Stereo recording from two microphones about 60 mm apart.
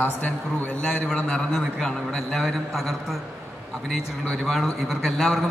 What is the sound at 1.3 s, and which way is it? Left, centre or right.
Speech, centre.